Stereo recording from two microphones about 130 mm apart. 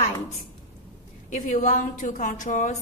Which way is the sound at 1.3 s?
85° left.